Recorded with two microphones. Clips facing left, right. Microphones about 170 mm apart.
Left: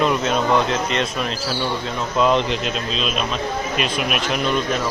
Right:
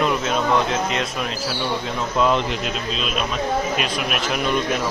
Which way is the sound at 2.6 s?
5° right (ahead or behind).